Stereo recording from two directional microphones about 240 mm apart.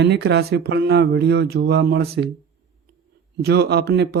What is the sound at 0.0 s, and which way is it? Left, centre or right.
Speech, right.